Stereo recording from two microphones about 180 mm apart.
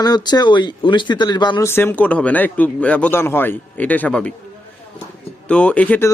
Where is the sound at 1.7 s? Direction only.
10° left (ahead or behind).